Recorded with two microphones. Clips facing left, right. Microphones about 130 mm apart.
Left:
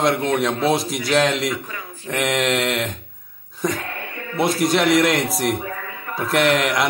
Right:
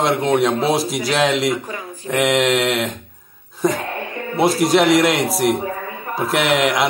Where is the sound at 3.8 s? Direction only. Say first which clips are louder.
Right 5 dB; 30° right (ahead or behind).